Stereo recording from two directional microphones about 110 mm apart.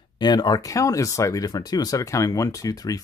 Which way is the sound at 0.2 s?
40° left (ahead or behind).